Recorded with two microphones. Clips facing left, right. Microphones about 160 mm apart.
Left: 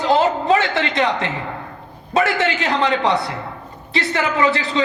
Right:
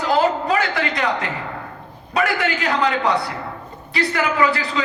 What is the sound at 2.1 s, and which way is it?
A man's voice, 25° left (ahead or behind).